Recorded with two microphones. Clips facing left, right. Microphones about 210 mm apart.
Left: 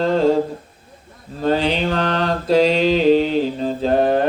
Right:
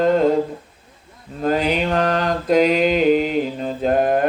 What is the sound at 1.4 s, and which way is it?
Mantra, 30° left (ahead or behind).